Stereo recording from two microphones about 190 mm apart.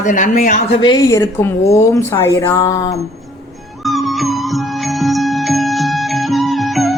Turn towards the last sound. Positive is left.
turn(degrees=0)  # may be behind; listen again after turning